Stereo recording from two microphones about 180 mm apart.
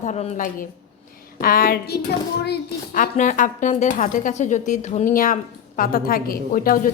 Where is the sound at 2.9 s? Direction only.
45° left (ahead or behind).